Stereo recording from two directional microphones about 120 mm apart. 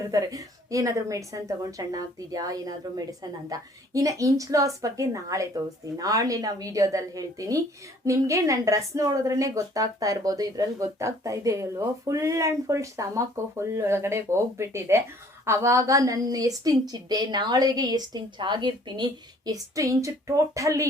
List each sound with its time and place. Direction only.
0.0 s a woman's voice: 30° right (ahead or behind)